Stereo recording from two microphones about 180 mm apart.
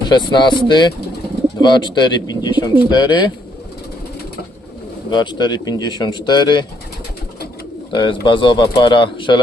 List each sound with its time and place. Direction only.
0.0 s speech: 25° left (ahead or behind)
5.1 s speech: 25° left (ahead or behind)
7.9 s speech: 25° left (ahead or behind)